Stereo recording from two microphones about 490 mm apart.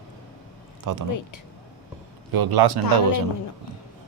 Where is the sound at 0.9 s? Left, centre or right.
Right.